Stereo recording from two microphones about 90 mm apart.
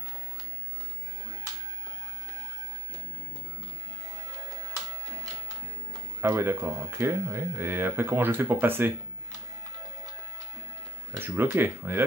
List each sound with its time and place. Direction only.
6.2 s speech: 25° right (ahead or behind)
11.1 s speech: 25° right (ahead or behind)